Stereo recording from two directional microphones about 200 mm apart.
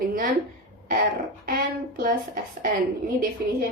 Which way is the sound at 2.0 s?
45° right (ahead or behind).